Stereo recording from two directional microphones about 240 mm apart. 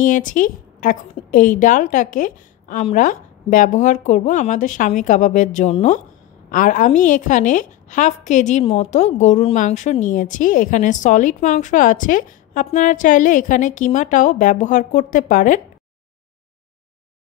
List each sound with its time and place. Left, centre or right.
0.0 s a woman's voice: left